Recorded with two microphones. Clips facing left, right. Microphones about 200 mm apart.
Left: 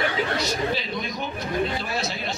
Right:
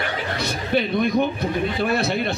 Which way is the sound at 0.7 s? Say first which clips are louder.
Right 11 dB; 60° right (ahead or behind).